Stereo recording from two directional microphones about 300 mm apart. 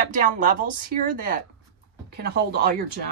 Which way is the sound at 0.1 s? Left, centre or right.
Right.